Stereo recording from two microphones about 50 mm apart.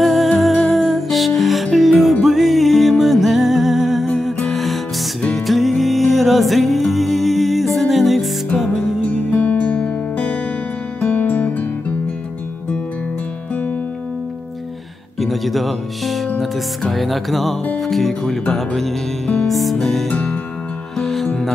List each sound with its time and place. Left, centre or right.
0.0 s music: centre
9.3 s music: left
15.1 s music: centre
20.1 s music: left
21.0 s music: centre